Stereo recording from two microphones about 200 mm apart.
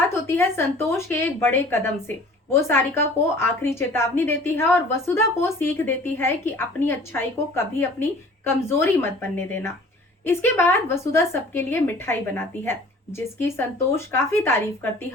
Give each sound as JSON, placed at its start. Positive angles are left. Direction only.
{"t": 0.1, "sound": "speech", "side_deg": 10}